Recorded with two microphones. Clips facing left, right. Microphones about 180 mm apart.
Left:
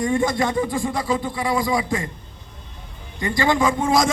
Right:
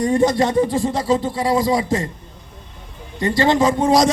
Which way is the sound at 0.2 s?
20° right (ahead or behind).